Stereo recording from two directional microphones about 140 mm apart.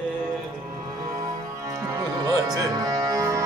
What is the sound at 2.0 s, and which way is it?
Music, 25° right (ahead or behind).